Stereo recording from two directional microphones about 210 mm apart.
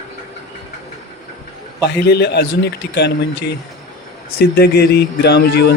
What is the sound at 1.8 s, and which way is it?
Speech, 50° left (ahead or behind).